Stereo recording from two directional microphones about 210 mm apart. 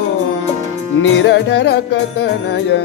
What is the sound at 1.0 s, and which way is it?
Music, 55° left (ahead or behind).